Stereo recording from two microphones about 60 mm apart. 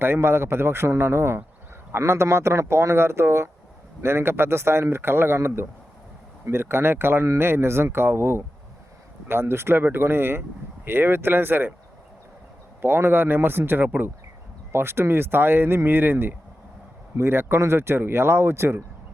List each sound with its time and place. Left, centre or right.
0.0 s speech: right
12.8 s speech: right